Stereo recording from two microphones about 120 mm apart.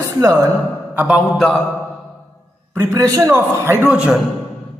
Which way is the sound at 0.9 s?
10° right (ahead or behind).